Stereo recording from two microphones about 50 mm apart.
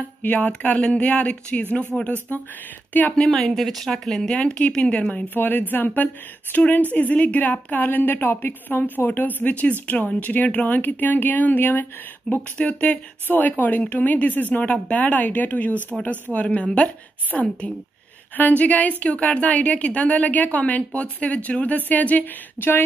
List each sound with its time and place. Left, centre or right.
0.2 s speech: left
2.9 s speech: left
3.2 s speech: centre; by 5.2 s left
5.3 s speech: left